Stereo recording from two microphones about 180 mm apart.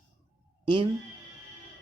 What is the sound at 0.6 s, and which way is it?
Speech, 25° right (ahead or behind).